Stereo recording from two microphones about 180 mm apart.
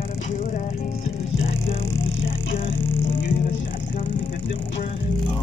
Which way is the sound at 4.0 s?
50° left (ahead or behind).